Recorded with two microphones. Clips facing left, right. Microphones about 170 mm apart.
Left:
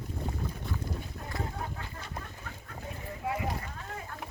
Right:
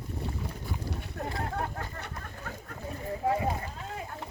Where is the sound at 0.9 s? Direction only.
70° right (ahead or behind).